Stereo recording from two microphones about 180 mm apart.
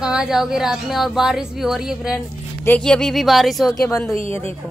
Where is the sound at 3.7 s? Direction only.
15° left (ahead or behind).